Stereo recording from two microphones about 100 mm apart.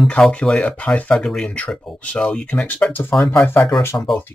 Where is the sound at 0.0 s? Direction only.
10° left (ahead or behind).